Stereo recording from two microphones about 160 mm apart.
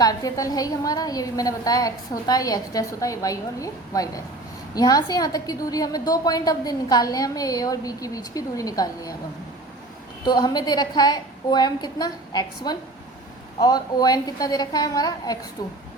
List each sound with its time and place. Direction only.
0.0 s a woman's voice: 20° left (ahead or behind)
10.2 s a woman's voice: 25° left (ahead or behind)